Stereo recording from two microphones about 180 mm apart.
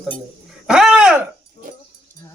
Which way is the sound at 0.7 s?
5° right (ahead or behind).